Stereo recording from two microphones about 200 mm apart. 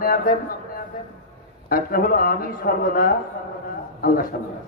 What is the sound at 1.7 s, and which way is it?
A man's voice, 45° left (ahead or behind).